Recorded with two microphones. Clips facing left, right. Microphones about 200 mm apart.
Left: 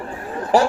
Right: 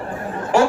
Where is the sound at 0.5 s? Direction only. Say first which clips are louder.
Even; 35° left (ahead or behind).